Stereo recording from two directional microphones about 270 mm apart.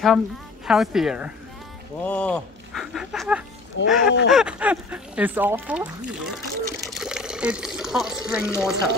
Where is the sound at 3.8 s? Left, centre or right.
Left.